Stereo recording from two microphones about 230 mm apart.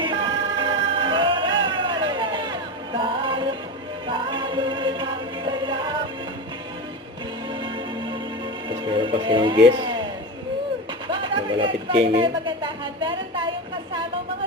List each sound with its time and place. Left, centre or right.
0.0 s music: right
7.6 s change ringing: right
8.7 s music: right
11.1 s a sound: right